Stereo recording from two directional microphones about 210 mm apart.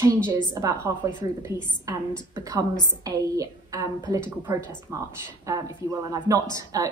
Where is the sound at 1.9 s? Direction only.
15° right (ahead or behind).